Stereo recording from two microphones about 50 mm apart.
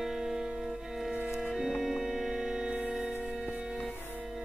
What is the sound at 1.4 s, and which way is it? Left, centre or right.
Organ, centre.